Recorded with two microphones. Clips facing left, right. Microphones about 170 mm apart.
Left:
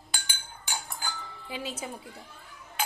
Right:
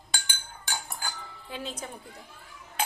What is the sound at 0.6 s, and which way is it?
Chink, 15° left (ahead or behind).